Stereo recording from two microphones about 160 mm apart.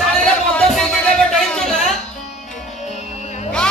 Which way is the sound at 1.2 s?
5° left (ahead or behind).